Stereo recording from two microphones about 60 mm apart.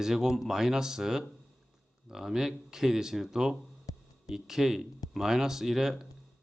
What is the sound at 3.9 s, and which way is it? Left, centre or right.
Music, left.